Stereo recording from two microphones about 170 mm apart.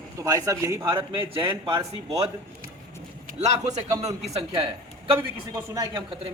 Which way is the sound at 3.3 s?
40° right (ahead or behind).